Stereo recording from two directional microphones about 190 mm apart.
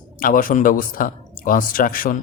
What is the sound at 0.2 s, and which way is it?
A man's voice, 45° left (ahead or behind).